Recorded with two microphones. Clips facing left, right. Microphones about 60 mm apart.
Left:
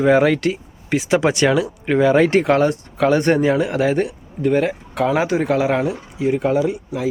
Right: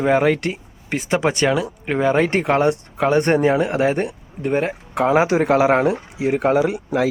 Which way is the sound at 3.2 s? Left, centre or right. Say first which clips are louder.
Even; right.